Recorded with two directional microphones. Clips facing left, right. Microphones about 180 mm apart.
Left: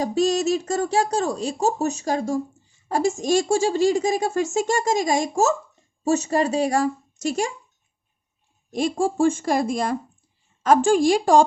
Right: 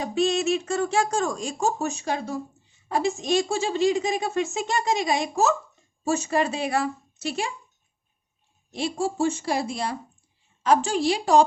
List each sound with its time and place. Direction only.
0.0 s speech: 40° left (ahead or behind)
8.7 s speech: 50° left (ahead or behind)